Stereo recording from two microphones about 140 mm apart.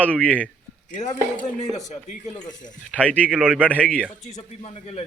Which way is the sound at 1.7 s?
55° left (ahead or behind).